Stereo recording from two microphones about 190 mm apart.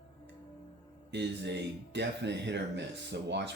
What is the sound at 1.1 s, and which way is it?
Speech, 65° right (ahead or behind).